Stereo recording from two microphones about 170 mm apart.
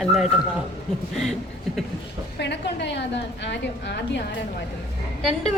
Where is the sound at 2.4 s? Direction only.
90° left.